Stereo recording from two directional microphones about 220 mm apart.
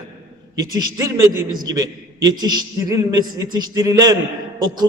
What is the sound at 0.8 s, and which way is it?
Speech, 15° right (ahead or behind).